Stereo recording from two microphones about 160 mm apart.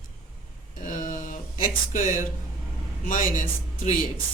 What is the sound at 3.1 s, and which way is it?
Speech, 55° left (ahead or behind).